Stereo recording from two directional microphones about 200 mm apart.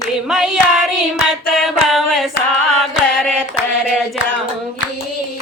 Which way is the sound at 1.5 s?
Centre (ahead or behind).